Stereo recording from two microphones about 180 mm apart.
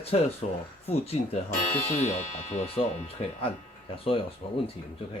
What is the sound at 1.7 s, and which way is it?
Speech, 15° left (ahead or behind).